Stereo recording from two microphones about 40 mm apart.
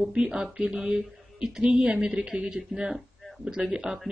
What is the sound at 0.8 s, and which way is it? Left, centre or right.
Speech, right.